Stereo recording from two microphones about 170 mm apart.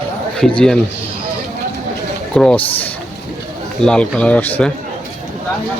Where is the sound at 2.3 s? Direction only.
5° left (ahead or behind).